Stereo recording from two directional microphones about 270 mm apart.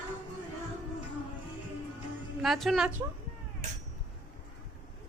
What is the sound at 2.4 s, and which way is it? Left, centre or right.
Speech, centre.